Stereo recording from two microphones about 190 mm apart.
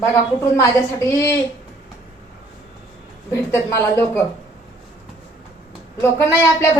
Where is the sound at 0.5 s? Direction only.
15° left (ahead or behind).